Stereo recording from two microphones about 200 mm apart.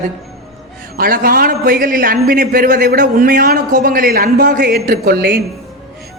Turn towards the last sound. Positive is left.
turn(degrees=-50)  # may be behind; listen again after turning